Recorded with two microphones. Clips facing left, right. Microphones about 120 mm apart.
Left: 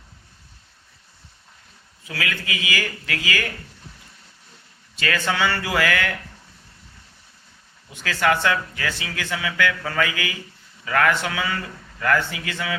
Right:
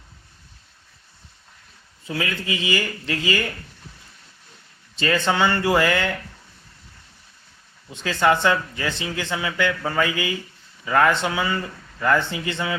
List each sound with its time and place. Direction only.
2.0 s speech: 25° right (ahead or behind)
4.9 s speech: 25° right (ahead or behind)
7.9 s speech: 25° right (ahead or behind)